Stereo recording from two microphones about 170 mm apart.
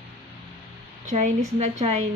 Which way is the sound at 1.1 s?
40° right (ahead or behind).